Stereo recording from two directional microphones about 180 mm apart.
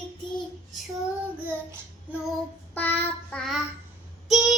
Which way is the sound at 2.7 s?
10° left (ahead or behind).